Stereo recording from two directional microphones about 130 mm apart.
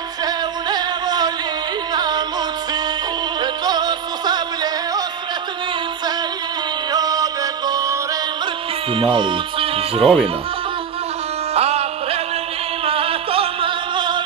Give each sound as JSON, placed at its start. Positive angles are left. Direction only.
{"t": 0.2, "sound": "music", "side_deg": -30}
{"t": 3.3, "sound": "music", "side_deg": -35}
{"t": 6.9, "sound": "music", "side_deg": -30}
{"t": 8.9, "sound": "speech", "side_deg": -40}
{"t": 11.5, "sound": "music", "side_deg": -55}